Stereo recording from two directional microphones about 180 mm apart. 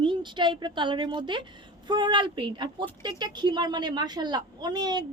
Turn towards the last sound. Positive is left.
turn(degrees=-20)  # may be behind; listen again after turning